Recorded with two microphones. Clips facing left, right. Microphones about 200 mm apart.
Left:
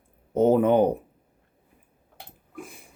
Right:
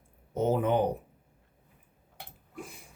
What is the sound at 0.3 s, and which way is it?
Speech, 55° left (ahead or behind).